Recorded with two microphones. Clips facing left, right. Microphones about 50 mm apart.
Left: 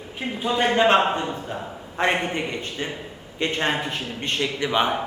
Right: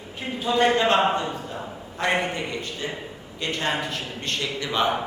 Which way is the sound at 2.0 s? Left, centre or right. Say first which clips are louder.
Left 2 dB; left.